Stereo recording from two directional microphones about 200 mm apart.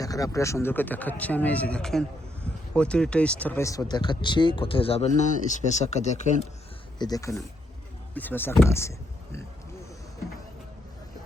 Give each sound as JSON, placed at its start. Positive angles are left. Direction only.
{"t": 0.0, "sound": "speech", "side_deg": 15}
{"t": 7.0, "sound": "speech", "side_deg": 15}